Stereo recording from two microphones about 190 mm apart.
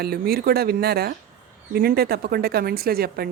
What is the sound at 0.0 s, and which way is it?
Speech, 55° right (ahead or behind).